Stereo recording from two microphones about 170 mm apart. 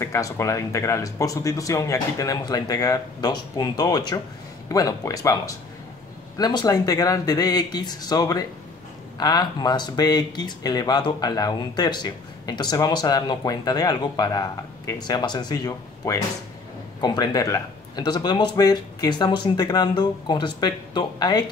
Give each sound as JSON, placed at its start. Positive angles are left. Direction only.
{"t": 0.0, "sound": "speech", "side_deg": 20}